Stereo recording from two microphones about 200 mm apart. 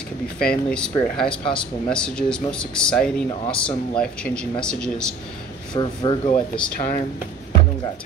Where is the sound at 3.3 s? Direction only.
25° left (ahead or behind).